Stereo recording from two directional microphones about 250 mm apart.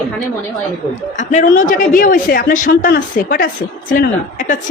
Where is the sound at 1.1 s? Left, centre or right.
Left.